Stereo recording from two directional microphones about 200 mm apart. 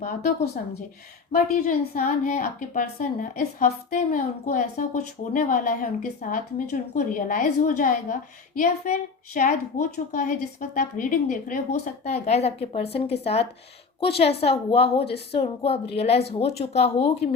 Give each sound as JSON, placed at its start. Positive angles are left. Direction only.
{"t": 0.0, "sound": "a woman's voice", "side_deg": 40}